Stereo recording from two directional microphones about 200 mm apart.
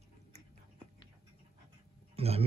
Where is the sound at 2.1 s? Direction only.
30° right (ahead or behind).